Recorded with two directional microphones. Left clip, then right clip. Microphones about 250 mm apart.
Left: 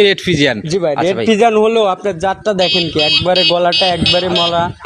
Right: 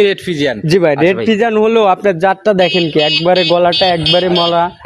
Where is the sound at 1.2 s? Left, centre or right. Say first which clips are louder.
Left 2 dB; centre.